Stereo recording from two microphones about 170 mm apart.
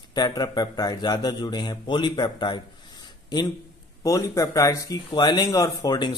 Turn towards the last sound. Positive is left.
turn(degrees=25)  # may be behind; listen again after turning